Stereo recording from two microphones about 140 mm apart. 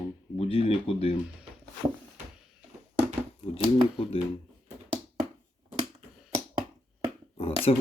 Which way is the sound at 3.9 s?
40° left (ahead or behind).